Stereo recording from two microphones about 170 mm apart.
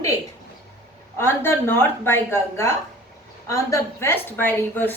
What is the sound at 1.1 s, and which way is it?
A woman's voice, 15° left (ahead or behind).